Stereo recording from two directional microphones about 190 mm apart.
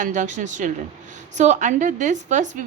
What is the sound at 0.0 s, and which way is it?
A woman's voice, 40° right (ahead or behind).